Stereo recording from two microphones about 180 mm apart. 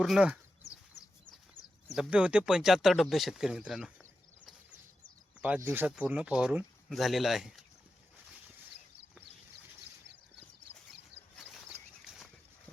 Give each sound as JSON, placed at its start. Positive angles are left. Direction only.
{"t": 0.0, "sound": "speech", "side_deg": -5}
{"t": 0.6, "sound": "bird", "side_deg": 15}
{"t": 1.9, "sound": "speech", "side_deg": -5}
{"t": 5.4, "sound": "speech", "side_deg": -10}